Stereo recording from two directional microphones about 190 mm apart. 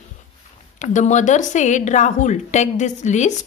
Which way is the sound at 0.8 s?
40° left (ahead or behind).